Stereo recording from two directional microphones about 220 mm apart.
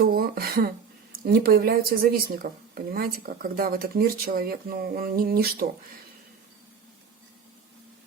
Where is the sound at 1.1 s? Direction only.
40° right (ahead or behind).